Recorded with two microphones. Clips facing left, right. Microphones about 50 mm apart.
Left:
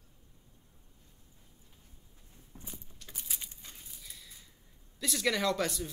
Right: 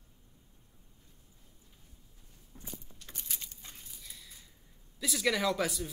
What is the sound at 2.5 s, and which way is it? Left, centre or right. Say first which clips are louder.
Keys jangling: even; left.